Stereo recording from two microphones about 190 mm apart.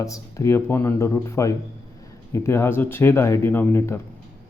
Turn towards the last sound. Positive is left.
turn(degrees=15)  # may be behind; listen again after turning